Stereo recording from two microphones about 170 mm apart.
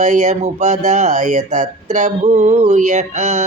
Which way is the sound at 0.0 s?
45° right (ahead or behind).